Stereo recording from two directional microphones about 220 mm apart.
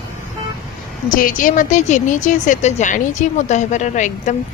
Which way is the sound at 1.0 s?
40° left (ahead or behind).